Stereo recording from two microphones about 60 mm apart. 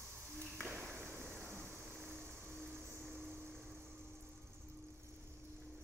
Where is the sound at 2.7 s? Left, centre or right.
Right.